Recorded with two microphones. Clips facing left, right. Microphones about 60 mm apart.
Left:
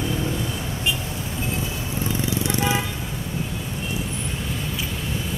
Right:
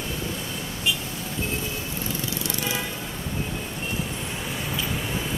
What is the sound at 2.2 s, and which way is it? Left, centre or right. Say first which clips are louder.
Vehicle: left 6 dB; left.